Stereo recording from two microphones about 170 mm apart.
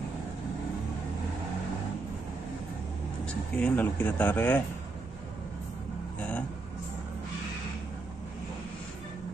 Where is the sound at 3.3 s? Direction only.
5° left (ahead or behind).